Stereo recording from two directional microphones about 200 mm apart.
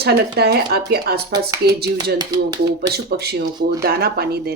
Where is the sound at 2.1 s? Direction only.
20° right (ahead or behind).